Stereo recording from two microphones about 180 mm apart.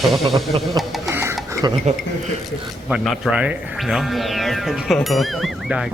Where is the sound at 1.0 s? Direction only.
15° right (ahead or behind).